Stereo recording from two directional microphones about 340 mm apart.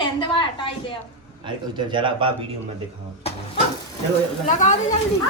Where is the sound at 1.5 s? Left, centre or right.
Centre.